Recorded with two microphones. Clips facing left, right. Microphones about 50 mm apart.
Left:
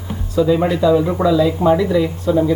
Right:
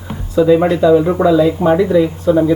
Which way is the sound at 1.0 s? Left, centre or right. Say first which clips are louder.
Right 4 dB; right.